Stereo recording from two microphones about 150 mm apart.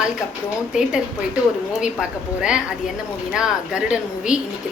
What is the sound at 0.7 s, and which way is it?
A woman's voice, 5° right (ahead or behind).